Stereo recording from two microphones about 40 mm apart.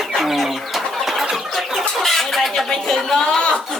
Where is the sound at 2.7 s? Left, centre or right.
Centre.